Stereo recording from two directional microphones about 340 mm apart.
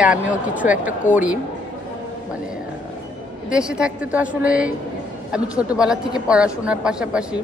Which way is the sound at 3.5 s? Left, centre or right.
Centre.